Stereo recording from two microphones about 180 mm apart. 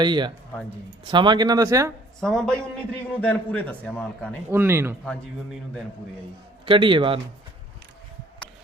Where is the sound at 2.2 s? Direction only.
5° left (ahead or behind).